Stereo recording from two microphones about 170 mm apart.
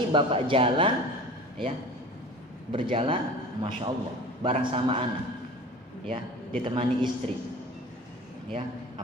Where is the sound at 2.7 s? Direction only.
30° right (ahead or behind).